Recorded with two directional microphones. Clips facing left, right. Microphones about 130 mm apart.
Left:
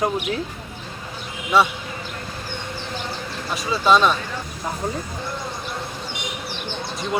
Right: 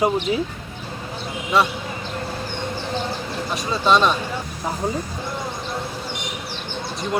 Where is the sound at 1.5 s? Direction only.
Centre (ahead or behind).